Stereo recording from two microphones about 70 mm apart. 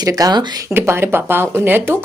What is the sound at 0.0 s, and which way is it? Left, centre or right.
Speech, right.